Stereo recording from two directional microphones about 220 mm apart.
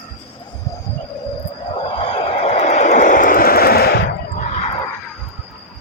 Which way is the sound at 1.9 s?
25° left (ahead or behind).